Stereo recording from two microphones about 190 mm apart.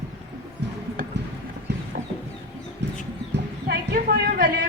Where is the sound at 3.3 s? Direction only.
65° right (ahead or behind).